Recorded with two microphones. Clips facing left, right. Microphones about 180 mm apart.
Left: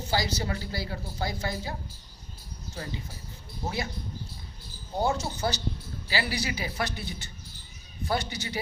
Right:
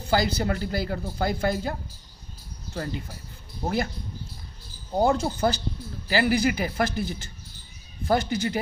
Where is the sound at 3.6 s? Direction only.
55° right (ahead or behind).